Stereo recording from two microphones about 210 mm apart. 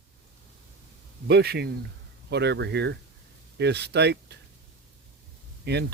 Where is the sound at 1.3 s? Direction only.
50° right (ahead or behind).